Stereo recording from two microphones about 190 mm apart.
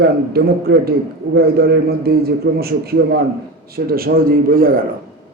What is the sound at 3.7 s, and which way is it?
A man's voice, 50° right (ahead or behind).